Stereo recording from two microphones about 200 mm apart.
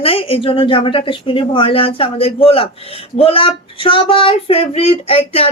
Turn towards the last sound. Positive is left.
turn(degrees=30)  # may be behind; listen again after turning